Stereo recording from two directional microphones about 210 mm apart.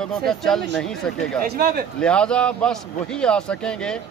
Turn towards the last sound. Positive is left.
turn(degrees=5)  # may be behind; listen again after turning